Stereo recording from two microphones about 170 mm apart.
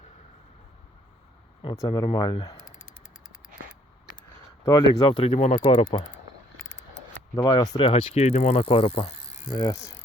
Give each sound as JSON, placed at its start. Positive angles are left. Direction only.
{"t": 1.7, "sound": "speech", "side_deg": 20}
{"t": 4.6, "sound": "speech", "side_deg": 25}
{"t": 7.3, "sound": "speech", "side_deg": 25}
{"t": 9.5, "sound": "speech", "side_deg": 25}